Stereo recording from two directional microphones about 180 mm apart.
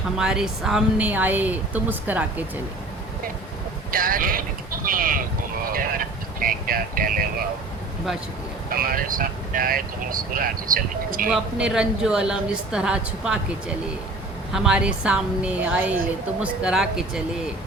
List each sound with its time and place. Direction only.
0.2 s a woman's voice: 5° right (ahead or behind)
3.9 s speech: 50° right (ahead or behind)
5.7 s a sound: 50° right (ahead or behind)
8.7 s speech: 55° right (ahead or behind)
11.3 s a woman's voice: 5° right (ahead or behind)